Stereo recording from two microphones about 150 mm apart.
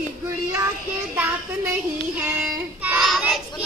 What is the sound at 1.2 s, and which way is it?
Child singing, 10° right (ahead or behind).